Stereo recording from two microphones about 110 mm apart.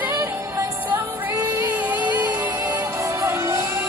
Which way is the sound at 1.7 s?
15° right (ahead or behind).